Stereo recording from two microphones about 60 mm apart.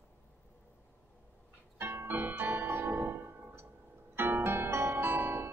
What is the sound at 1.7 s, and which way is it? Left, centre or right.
Music, right.